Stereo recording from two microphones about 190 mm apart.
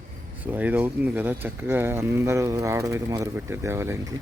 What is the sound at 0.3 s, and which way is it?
Speech, 10° right (ahead or behind).